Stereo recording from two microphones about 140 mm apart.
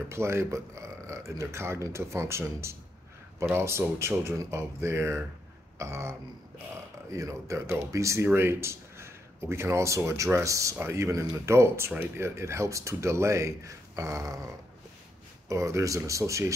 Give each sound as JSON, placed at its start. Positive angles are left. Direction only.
{"t": 0.1, "sound": "speech", "side_deg": -20}